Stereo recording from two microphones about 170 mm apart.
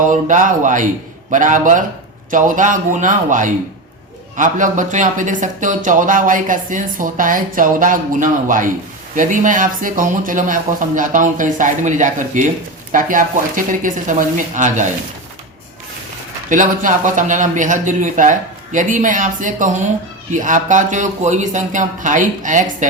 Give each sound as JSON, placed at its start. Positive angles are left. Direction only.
{"t": 0.0, "sound": "speech", "side_deg": -50}
{"t": 16.5, "sound": "speech", "side_deg": -50}